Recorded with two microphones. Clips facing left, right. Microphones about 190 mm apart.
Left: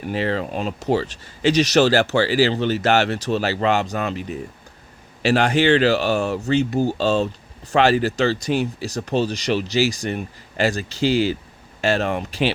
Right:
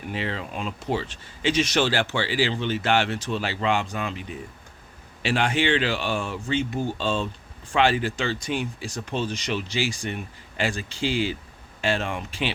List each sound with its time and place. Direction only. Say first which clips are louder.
0.1 s speech: left 8 dB; 40° left (ahead or behind)